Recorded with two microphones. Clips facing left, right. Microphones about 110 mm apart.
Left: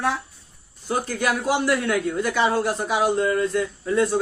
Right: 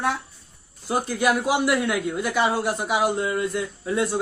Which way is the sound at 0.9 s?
15° right (ahead or behind).